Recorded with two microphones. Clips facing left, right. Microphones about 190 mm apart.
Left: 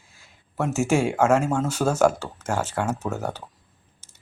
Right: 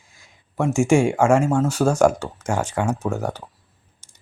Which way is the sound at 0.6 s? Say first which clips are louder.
Right 5 dB; 5° left (ahead or behind).